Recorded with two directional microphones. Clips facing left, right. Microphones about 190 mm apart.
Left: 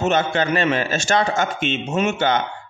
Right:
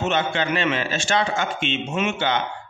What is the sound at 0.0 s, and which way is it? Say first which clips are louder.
A man's voice: left 4 dB; 40° left (ahead or behind).